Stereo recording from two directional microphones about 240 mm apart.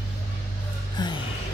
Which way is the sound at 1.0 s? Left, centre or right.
Centre.